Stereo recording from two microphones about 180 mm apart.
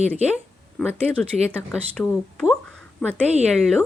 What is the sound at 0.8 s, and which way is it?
Speech, 5° left (ahead or behind).